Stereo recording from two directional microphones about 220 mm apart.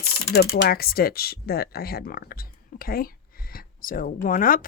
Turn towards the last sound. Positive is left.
turn(degrees=40)  # may be behind; listen again after turning